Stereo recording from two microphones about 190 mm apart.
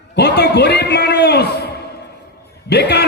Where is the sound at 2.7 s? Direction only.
60° left (ahead or behind).